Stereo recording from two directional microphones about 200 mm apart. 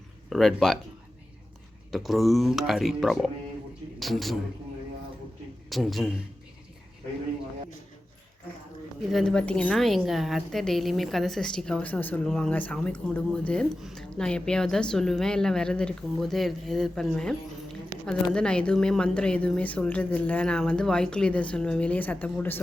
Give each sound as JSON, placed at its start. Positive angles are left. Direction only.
{"t": 0.3, "sound": "a woman's voice", "side_deg": 0}
{"t": 1.9, "sound": "a woman's voice", "side_deg": 0}
{"t": 5.6, "sound": "a man's voice", "side_deg": 0}
{"t": 9.0, "sound": "a woman's voice", "side_deg": 0}